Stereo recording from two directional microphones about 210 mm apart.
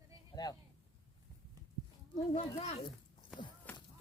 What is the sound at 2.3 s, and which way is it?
Speech, 30° left (ahead or behind).